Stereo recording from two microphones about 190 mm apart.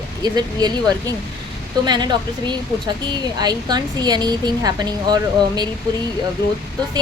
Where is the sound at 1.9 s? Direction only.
20° right (ahead or behind).